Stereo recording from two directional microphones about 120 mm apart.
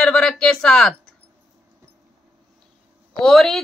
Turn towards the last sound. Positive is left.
turn(degrees=0)  # may be behind; listen again after turning